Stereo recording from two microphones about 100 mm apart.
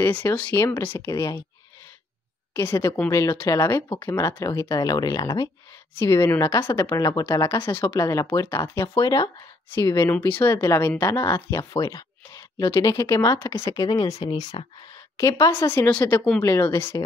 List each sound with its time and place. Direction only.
0.1 s speech: 15° left (ahead or behind); by 1.4 s 35° left (ahead or behind)
2.5 s speech: 25° left (ahead or behind)
3.1 s speech: 35° left (ahead or behind)
5.9 s speech: 25° left (ahead or behind)
10.1 s speech: 20° left (ahead or behind)